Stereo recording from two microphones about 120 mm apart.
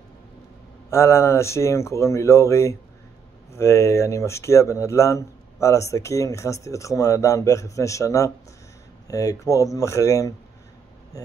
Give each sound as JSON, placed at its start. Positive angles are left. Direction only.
{"t": 0.8, "sound": "speech", "side_deg": 20}